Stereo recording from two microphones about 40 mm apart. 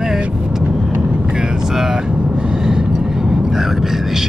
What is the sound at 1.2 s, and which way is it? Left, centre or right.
Vehicle, centre.